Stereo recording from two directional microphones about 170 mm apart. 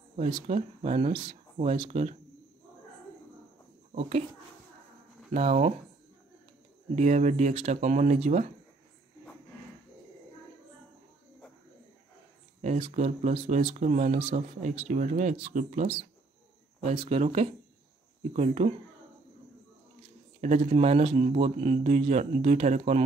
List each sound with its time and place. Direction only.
0.5 s speech: 40° right (ahead or behind)
3.9 s speech: 40° right (ahead or behind)
5.3 s speech: 40° right (ahead or behind)
7.0 s speech: 45° right (ahead or behind)
12.6 s speech: 40° right (ahead or behind)
17.0 s speech: 35° right (ahead or behind)
20.3 s speech: 45° right (ahead or behind)